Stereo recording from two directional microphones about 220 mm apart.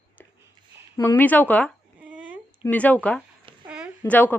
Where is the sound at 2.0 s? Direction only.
5° right (ahead or behind).